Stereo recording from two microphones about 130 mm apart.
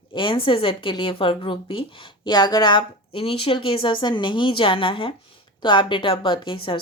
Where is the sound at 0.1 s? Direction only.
40° left (ahead or behind).